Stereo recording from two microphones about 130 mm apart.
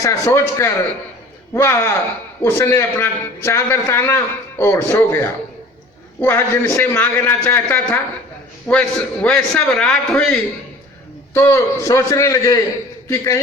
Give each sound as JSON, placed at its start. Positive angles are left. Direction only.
{"t": 0.0, "sound": "a man's voice", "side_deg": 20}
{"t": 11.3, "sound": "a man's voice", "side_deg": 20}